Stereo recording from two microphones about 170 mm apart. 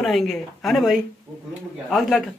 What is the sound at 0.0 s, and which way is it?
Speech, centre (ahead or behind).